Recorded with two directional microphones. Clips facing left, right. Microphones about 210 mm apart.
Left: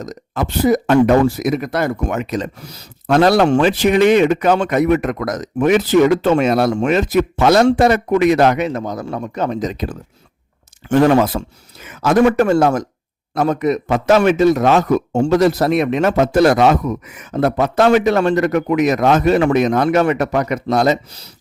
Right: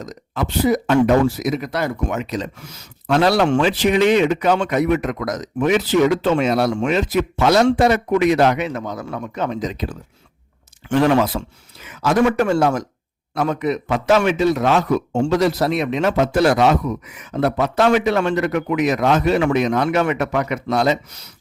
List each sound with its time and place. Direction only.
0.0 s a man's voice: 45° left (ahead or behind)
2.6 s a man's voice: 35° left (ahead or behind)